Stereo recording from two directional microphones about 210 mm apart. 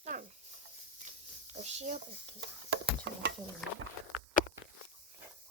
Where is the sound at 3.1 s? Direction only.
55° right (ahead or behind).